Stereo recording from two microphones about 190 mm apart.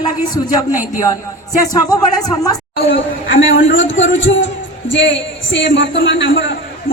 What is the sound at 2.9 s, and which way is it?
A man's voice, 90° left.